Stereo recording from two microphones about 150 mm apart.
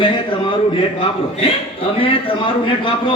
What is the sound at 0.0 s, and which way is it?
A man's voice, 35° left (ahead or behind).